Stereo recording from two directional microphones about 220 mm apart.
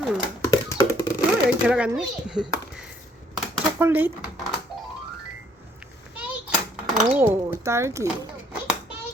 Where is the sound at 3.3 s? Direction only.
10° right (ahead or behind).